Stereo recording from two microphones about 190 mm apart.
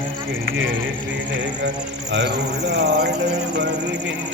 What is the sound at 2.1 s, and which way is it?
Speech, 65° right (ahead or behind).